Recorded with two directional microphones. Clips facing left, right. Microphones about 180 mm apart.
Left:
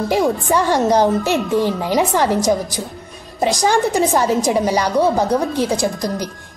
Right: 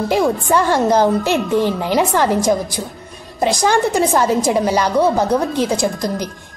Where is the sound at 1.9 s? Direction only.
15° left (ahead or behind).